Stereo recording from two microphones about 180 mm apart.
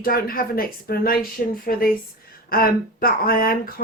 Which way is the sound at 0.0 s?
55° left (ahead or behind).